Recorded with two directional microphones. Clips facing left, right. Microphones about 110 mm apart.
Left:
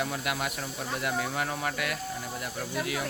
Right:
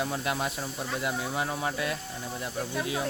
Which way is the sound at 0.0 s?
25° right (ahead or behind).